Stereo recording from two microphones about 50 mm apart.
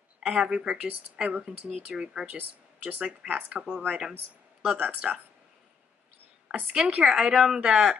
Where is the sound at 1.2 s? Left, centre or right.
Centre.